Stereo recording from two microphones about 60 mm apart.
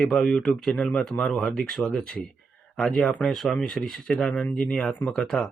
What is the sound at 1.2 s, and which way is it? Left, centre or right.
Speech, centre.